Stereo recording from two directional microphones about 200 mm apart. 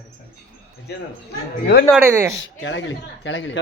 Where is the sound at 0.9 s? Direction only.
55° left (ahead or behind).